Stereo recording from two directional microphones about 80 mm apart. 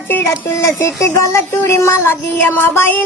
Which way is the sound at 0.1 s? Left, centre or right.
Left.